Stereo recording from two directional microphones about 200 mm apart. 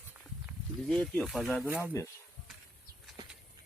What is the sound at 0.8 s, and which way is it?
Speech, 5° left (ahead or behind).